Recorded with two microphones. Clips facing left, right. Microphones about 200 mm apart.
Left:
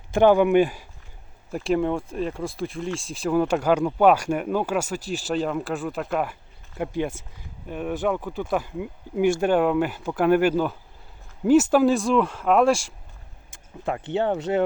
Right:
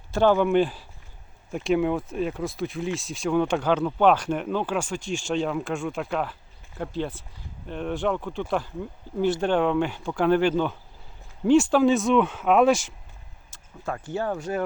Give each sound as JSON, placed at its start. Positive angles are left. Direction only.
{"t": 0.1, "sound": "speech", "side_deg": 15}
{"t": 1.5, "sound": "speech", "side_deg": 0}
{"t": 13.8, "sound": "speech", "side_deg": 20}